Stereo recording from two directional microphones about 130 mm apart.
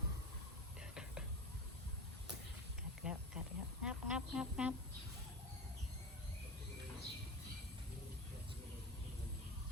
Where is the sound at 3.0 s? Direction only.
5° right (ahead or behind).